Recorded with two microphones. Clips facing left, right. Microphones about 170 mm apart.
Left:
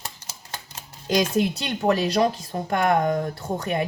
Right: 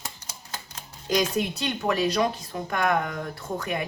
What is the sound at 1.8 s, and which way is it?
Speech, 40° left (ahead or behind).